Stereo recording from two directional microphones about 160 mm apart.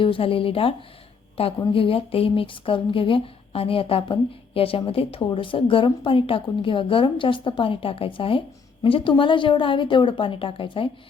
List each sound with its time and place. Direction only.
0.0 s speech: 35° left (ahead or behind)
1.7 s speech: 35° left (ahead or behind)